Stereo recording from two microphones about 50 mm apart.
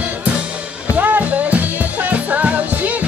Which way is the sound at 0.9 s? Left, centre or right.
Right.